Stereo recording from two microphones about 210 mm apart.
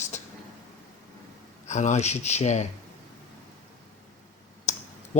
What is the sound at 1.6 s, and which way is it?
Speech, 35° left (ahead or behind).